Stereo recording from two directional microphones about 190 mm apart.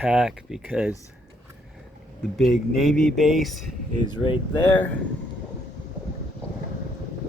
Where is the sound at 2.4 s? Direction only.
Centre (ahead or behind).